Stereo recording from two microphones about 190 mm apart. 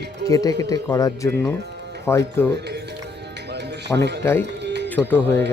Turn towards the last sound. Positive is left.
turn(degrees=10)  # may be behind; listen again after turning